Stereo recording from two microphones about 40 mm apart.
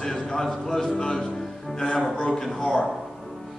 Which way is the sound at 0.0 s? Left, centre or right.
Centre.